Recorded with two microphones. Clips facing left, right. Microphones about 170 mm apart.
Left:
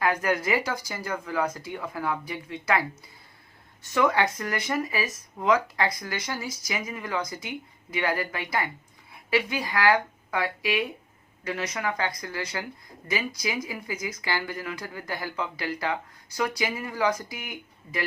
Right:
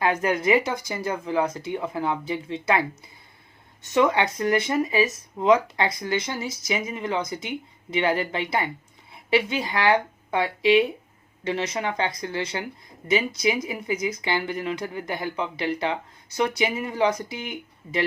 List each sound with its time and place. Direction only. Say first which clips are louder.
0.0 s speech: right 3 dB; 25° right (ahead or behind)